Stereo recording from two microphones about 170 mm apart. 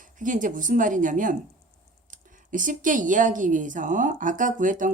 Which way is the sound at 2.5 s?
50° right (ahead or behind).